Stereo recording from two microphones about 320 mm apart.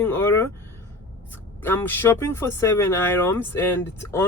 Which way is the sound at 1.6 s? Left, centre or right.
Centre.